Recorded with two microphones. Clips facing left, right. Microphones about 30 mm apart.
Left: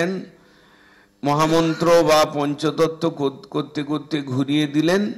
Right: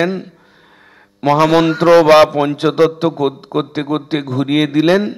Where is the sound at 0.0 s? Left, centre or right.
Right.